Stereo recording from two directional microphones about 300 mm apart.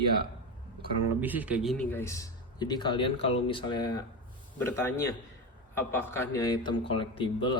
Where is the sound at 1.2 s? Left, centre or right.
Centre.